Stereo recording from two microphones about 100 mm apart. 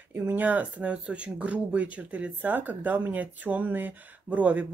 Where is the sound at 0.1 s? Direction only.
20° right (ahead or behind).